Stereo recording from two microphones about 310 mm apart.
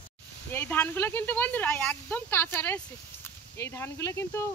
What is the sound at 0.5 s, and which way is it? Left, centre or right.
Speech, centre.